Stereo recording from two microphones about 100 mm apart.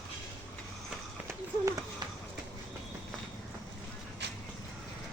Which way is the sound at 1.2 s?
30° right (ahead or behind).